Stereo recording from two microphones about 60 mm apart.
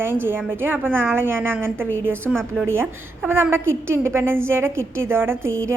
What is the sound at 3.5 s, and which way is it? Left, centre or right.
A woman's voice, right.